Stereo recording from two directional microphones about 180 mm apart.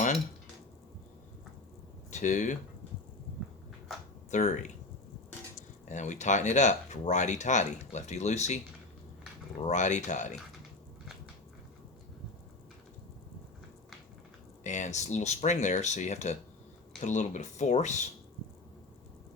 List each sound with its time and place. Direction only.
2.0 s speech: 40° left (ahead or behind)
4.3 s speech: 45° left (ahead or behind)
5.9 s speech: 40° left (ahead or behind)
9.6 s speech: 40° left (ahead or behind)
14.6 s speech: 40° left (ahead or behind)